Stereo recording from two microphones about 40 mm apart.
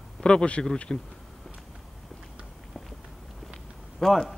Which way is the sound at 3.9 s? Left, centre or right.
Centre.